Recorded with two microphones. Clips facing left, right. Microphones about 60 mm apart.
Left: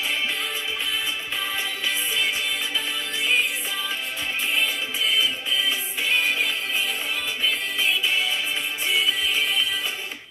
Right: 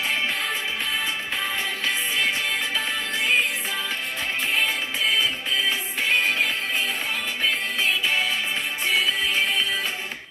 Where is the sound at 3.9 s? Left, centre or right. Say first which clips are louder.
Right 1 dB; right.